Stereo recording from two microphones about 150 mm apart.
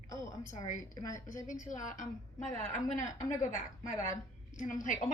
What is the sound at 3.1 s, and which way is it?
A woman's voice, 60° left (ahead or behind).